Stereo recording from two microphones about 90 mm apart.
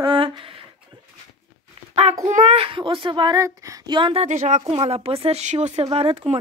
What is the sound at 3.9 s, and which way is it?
A woman's voice, 65° right (ahead or behind).